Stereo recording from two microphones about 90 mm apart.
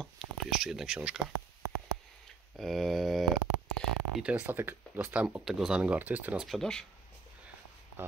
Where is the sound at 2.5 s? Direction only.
Centre (ahead or behind).